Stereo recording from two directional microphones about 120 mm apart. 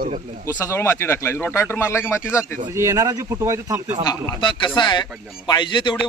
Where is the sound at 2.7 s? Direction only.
25° right (ahead or behind).